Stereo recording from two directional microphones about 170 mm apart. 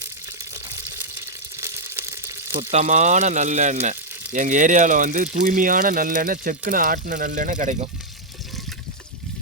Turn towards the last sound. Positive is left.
turn(degrees=-45)  # may be behind; listen again after turning